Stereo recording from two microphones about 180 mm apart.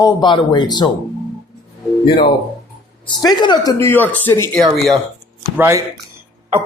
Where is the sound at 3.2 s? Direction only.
25° left (ahead or behind); by 5.0 s centre (ahead or behind).